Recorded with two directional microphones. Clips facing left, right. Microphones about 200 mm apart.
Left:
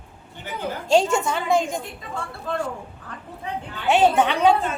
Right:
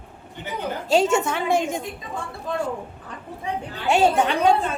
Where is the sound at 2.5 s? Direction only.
15° right (ahead or behind).